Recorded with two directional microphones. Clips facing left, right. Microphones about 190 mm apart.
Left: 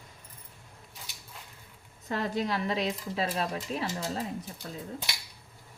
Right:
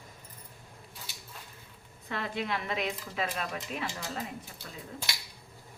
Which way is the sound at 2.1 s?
40° left (ahead or behind).